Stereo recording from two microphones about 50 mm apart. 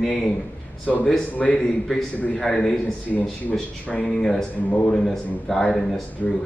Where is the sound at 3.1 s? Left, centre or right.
Centre.